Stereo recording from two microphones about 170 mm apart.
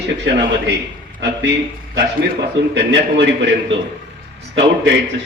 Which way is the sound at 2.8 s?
80° right.